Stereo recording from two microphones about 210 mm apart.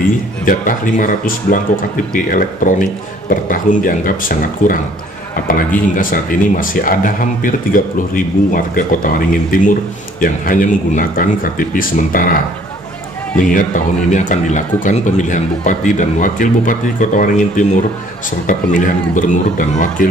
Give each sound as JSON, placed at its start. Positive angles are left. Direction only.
{"t": 0.5, "sound": "speech", "side_deg": 40}
{"t": 13.4, "sound": "speech", "side_deg": 40}